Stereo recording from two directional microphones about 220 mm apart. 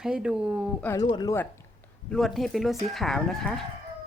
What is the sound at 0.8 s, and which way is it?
Speech, 15° left (ahead or behind).